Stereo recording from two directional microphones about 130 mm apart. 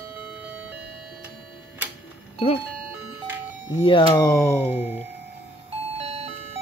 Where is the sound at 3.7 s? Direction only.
45° left (ahead or behind).